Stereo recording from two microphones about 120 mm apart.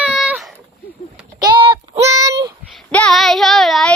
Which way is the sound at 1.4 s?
40° right (ahead or behind).